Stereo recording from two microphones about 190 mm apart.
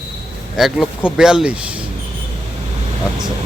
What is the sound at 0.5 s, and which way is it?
Speech, centre (ahead or behind).